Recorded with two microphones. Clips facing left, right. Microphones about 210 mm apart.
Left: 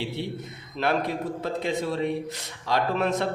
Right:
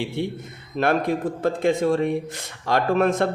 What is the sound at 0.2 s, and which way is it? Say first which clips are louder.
A man's voice: right 5 dB; 50° right (ahead or behind).